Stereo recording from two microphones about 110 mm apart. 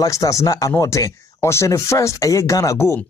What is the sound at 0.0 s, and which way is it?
Speech, 30° left (ahead or behind).